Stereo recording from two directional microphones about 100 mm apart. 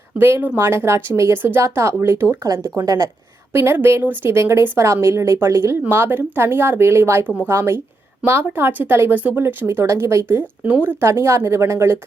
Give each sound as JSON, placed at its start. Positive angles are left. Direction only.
{"t": 0.2, "sound": "speech", "side_deg": -25}
{"t": 3.5, "sound": "speech", "side_deg": -25}